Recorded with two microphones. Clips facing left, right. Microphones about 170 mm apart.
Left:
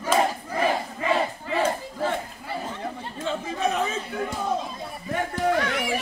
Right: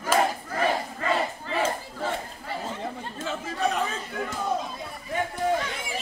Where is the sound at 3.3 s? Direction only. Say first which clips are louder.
Left 2 dB; centre (ahead or behind).